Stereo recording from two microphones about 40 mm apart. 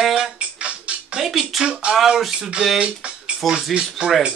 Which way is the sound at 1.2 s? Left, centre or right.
Centre.